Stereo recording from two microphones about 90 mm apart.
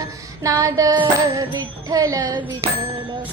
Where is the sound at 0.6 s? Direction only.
40° right (ahead or behind).